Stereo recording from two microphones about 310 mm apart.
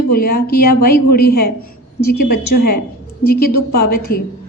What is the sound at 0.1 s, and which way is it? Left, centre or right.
Speech, left.